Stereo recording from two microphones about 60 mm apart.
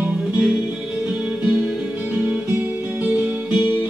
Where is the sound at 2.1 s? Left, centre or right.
Right.